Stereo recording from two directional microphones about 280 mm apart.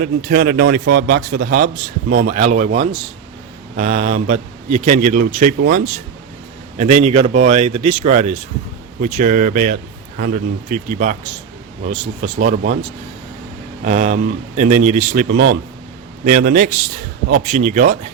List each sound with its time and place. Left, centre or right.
0.3 s a man's voice: right
13.8 s a man's voice: right